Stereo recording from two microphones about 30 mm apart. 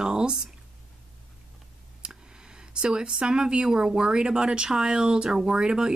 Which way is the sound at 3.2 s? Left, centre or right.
Right.